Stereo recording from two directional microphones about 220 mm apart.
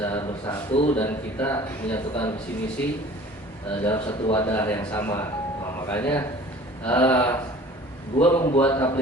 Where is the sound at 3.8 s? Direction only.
10° left (ahead or behind).